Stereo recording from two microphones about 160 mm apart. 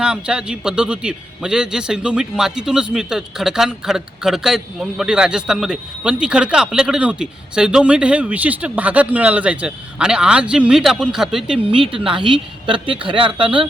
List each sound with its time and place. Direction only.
0.0 s a man's voice: 5° right (ahead or behind)
11.7 s a woman's voice: 35° right (ahead or behind)